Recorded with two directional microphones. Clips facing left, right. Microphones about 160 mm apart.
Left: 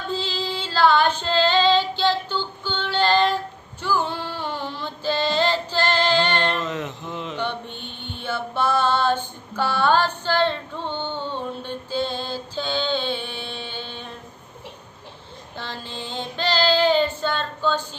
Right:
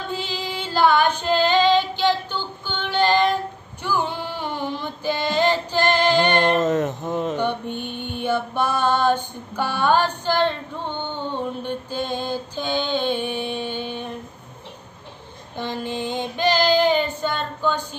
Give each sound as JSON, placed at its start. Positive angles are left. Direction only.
{"t": 0.1, "sound": "female singing", "side_deg": -15}
{"t": 3.8, "sound": "a sound", "side_deg": -15}
{"t": 6.5, "sound": "a sound", "side_deg": -45}
{"t": 7.4, "sound": "mantra", "side_deg": -10}
{"t": 11.6, "sound": "mantra", "side_deg": -15}
{"t": 15.5, "sound": "female singing", "side_deg": -15}